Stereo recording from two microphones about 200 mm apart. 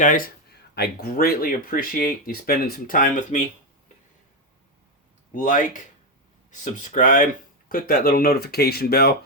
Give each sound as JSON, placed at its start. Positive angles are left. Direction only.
{"t": 0.0, "sound": "speech", "side_deg": 40}
{"t": 5.3, "sound": "speech", "side_deg": 40}